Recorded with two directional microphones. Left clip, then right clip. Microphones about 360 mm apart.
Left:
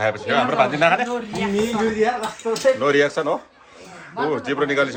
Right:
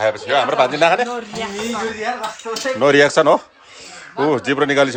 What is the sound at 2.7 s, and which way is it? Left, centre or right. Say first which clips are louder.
Speech: right 6 dB; centre.